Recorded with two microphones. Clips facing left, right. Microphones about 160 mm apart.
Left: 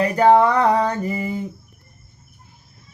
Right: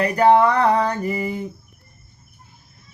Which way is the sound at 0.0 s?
30° left (ahead or behind).